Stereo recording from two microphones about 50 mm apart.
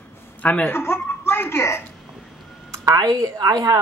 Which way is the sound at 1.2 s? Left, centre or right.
Left.